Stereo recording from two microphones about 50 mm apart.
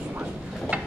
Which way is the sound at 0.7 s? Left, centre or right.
Right.